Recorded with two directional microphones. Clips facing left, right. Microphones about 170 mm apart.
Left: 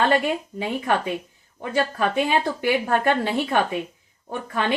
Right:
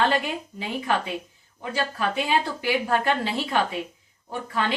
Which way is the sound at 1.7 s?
55° left (ahead or behind).